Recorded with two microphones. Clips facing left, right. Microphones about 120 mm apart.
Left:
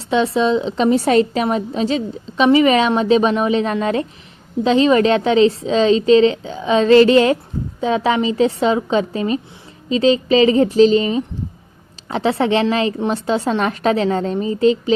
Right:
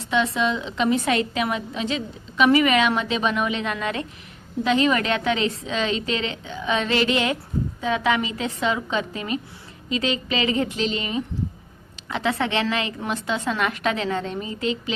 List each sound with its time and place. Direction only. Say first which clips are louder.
0.0 s a woman's voice: left 6 dB; 30° left (ahead or behind)